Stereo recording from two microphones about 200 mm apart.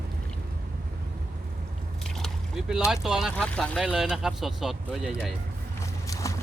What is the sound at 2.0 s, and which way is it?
Speech, centre (ahead or behind).